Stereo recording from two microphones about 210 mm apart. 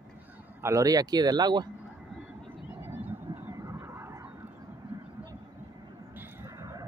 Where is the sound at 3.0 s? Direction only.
10° right (ahead or behind).